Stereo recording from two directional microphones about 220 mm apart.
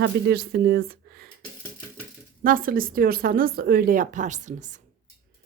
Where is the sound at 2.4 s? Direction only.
40° right (ahead or behind).